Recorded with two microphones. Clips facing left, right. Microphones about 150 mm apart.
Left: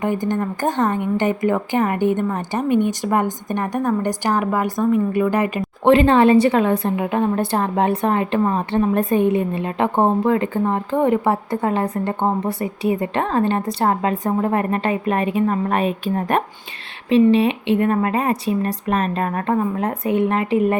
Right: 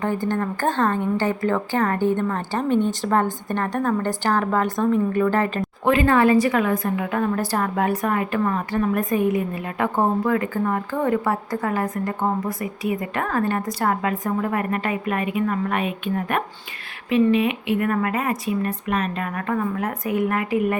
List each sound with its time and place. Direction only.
0.0 s a woman's voice: 15° left (ahead or behind)
5.8 s a woman's voice: 25° left (ahead or behind)